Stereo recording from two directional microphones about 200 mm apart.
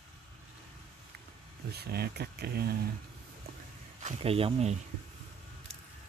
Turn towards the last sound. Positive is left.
turn(degrees=-30)  # may be behind; listen again after turning